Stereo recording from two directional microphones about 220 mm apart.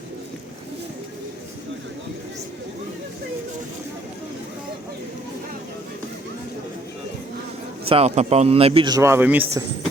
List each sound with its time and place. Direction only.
7.9 s a man's voice: 30° right (ahead or behind); by 9.6 s 10° right (ahead or behind)